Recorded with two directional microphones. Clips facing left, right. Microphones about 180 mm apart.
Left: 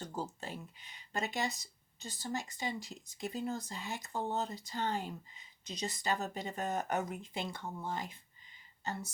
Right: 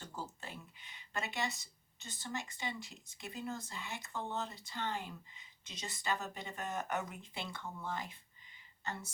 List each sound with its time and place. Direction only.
0.0 s speech: 35° left (ahead or behind)